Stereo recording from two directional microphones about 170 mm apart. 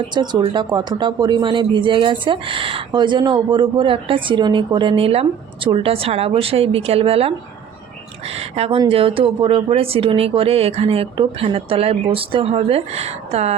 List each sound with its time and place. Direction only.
0.1 s speech: 25° right (ahead or behind)
8.4 s speech: 35° right (ahead or behind)